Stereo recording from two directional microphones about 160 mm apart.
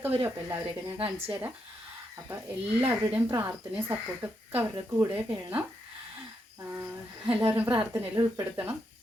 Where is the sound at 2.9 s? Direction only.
15° right (ahead or behind).